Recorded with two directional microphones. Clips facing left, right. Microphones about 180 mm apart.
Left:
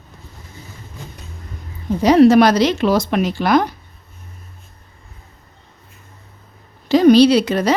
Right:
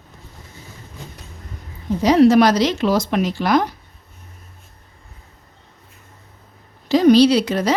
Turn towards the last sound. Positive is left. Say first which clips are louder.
# left 2 dB
turn(degrees=60)  # may be behind; listen again after turning